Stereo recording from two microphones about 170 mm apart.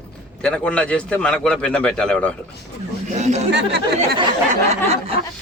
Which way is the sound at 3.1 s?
40° right (ahead or behind).